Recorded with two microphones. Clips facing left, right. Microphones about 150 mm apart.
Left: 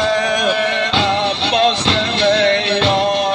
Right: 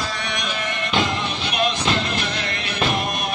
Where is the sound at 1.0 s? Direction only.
30° left (ahead or behind).